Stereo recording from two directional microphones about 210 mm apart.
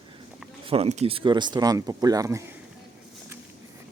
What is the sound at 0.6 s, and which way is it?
Speech, 30° right (ahead or behind).